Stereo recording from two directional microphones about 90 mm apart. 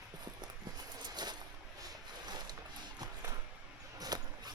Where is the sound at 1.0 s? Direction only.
50° right (ahead or behind).